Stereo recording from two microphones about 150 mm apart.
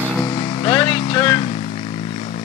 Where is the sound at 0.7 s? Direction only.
30° left (ahead or behind).